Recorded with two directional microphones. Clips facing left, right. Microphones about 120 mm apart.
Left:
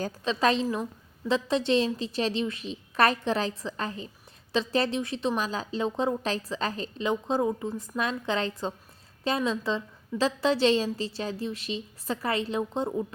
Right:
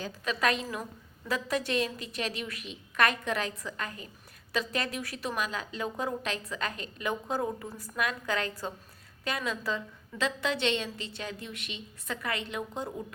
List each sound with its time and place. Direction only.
0.3 s a woman's voice: 30° left (ahead or behind)
7.1 s a woman's voice: 20° left (ahead or behind)